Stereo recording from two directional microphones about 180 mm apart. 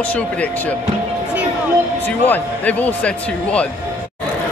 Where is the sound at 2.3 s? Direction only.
10° left (ahead or behind).